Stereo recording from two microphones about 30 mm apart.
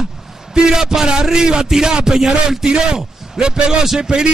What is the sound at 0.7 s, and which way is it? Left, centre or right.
A man's voice, right.